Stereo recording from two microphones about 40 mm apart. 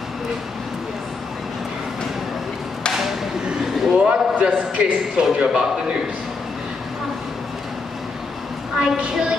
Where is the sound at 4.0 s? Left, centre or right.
Right.